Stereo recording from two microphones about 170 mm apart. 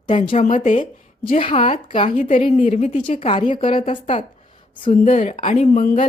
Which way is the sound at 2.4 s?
40° left (ahead or behind).